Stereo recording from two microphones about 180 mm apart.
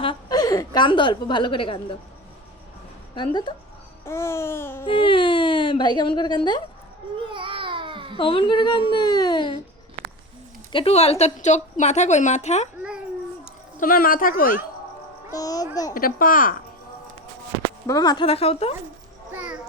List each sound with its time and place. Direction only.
0.0 s a woman's voice: 25° left (ahead or behind)
3.2 s speech: 25° left (ahead or behind)
4.0 s babbling: 15° left (ahead or behind)
4.9 s speech: 30° left (ahead or behind)
7.2 s babbling: 30° right (ahead or behind)
8.2 s speech: 30° left (ahead or behind)
10.7 s a woman's voice: 30° left (ahead or behind)
13.7 s speech: 50° left (ahead or behind)
15.4 s speech: 20° left (ahead or behind)
15.9 s speech: 50° left (ahead or behind)
17.8 s speech: 20° left (ahead or behind)
19.3 s a child's voice: 10° right (ahead or behind)